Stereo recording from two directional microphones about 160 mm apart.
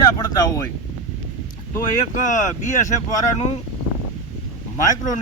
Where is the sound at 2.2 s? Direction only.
50° left (ahead or behind).